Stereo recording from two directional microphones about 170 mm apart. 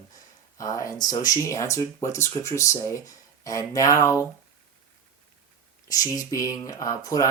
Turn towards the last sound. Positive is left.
turn(degrees=20)  # may be behind; listen again after turning